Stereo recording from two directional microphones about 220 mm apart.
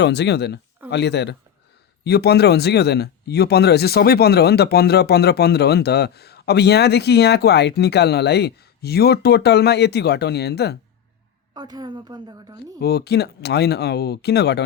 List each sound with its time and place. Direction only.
0.0 s speech: 50° left (ahead or behind)
11.5 s a woman's voice: 20° right (ahead or behind)
12.8 s speech: 45° left (ahead or behind)